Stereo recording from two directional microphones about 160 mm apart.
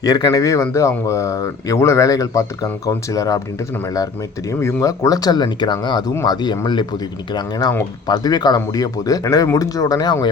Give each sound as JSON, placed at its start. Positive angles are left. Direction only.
{"t": 0.0, "sound": "speech", "side_deg": 25}